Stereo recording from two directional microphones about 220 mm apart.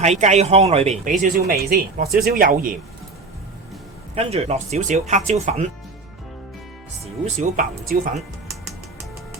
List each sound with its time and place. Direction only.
0.0 s speech: 30° right (ahead or behind)
4.1 s speech: 30° right (ahead or behind)
7.3 s speech: 35° right (ahead or behind)